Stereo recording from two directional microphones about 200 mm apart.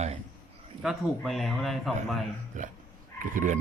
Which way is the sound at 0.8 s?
Centre (ahead or behind).